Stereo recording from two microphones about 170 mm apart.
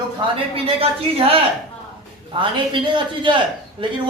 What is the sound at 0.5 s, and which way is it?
A woman's voice, 35° right (ahead or behind).